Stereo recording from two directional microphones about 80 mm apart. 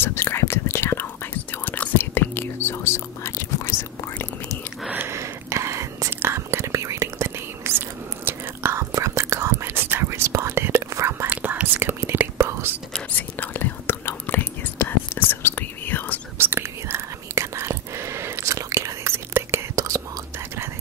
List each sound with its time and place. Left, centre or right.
0.0 s whispering: left
4.9 s whispering: right
11.2 s whispering: centre
13.4 s whispering: left
16.3 s whispering: right